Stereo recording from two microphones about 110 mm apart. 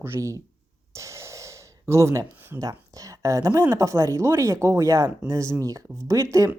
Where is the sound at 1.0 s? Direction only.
25° right (ahead or behind).